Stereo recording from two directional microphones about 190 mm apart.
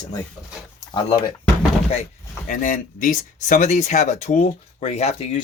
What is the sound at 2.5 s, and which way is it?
Speech, 40° left (ahead or behind).